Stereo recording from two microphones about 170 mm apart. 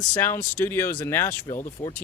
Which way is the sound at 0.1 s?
15° left (ahead or behind).